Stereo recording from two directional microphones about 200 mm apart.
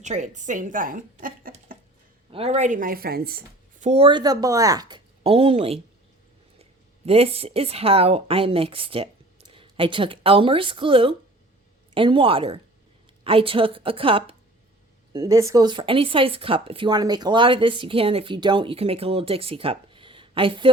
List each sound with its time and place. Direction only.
0.0 s speech: 35° right (ahead or behind)
2.3 s speech: 30° right (ahead or behind); by 3.8 s 50° right (ahead or behind)
3.8 s speech: 30° right (ahead or behind)